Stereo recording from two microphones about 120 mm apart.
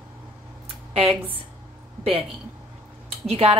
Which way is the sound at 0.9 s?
55° right (ahead or behind).